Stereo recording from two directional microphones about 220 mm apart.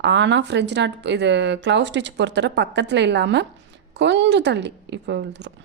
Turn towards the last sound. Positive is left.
turn(degrees=-55)  # may be behind; listen again after turning